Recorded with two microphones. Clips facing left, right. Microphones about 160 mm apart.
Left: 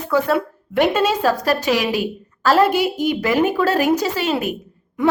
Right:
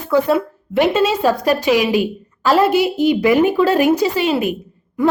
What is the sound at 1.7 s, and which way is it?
Speech, 40° left (ahead or behind).